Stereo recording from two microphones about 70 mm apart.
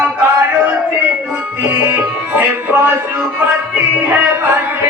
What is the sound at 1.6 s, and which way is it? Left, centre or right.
Music, right.